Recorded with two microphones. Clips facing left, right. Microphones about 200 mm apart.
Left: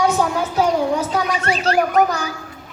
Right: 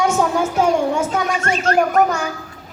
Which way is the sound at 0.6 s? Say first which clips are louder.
Even; 35° left (ahead or behind).